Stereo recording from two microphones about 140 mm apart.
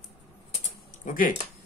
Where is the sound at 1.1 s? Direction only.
75° left (ahead or behind).